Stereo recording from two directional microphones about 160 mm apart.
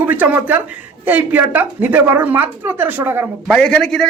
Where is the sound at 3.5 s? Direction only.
5° left (ahead or behind).